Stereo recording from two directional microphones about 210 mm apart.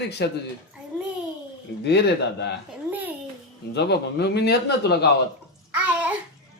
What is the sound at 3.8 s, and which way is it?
A man's voice, 55° left (ahead or behind).